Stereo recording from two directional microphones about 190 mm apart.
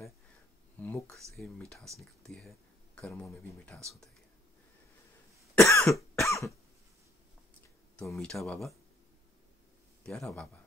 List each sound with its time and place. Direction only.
0.7 s speech: 10° left (ahead or behind)
5.7 s cough: 15° left (ahead or behind)
7.9 s speech: 5° left (ahead or behind)
10.0 s speech: 5° left (ahead or behind)